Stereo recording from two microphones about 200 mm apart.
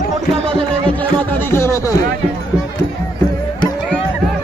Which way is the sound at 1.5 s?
15° left (ahead or behind).